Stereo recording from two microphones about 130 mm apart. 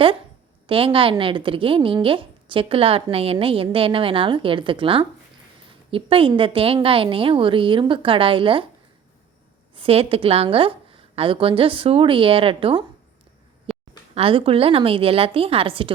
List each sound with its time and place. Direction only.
0.7 s a woman's voice: 45° right (ahead or behind)
9.7 s a woman's voice: 45° right (ahead or behind)
13.7 s a sound: centre (ahead or behind)
14.2 s a woman's voice: 45° right (ahead or behind)